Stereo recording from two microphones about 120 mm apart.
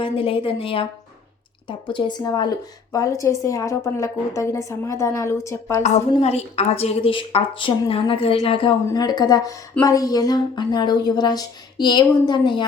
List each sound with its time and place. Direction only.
0.0 s a woman's voice: 50° left (ahead or behind); by 5.8 s 25° left (ahead or behind)
6.1 s a woman's voice: 60° left (ahead or behind)
8.9 s speech: 35° left (ahead or behind)